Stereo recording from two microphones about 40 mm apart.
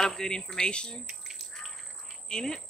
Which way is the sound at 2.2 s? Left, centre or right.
Centre.